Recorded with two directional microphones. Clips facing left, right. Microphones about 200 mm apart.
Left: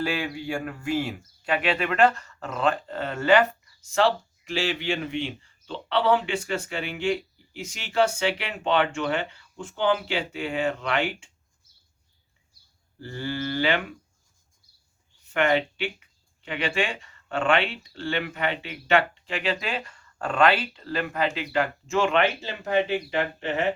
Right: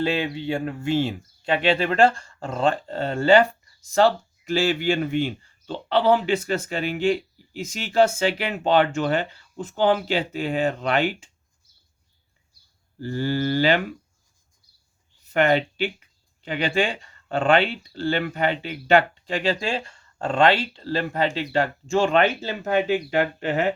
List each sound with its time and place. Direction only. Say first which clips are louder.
0.0 s speech: right 4 dB; 25° right (ahead or behind)
3.9 s speech: right 4 dB; 40° right (ahead or behind)
13.1 s speech: right 6 dB; 35° right (ahead or behind)
15.3 s speech: right 3 dB; 35° right (ahead or behind)